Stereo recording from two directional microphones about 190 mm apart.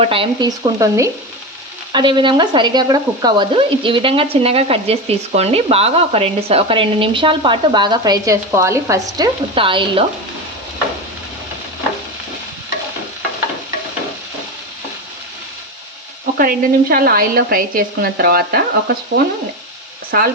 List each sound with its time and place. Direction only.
0.0 s speech: 30° right (ahead or behind)
16.2 s a woman's voice: 50° right (ahead or behind)
20.1 s speech: 50° right (ahead or behind)